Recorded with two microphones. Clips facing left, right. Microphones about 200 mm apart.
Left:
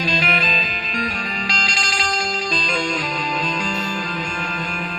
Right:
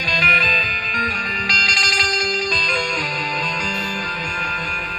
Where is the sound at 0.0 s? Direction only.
25° left (ahead or behind).